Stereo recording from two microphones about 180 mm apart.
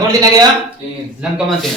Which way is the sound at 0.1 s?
20° right (ahead or behind).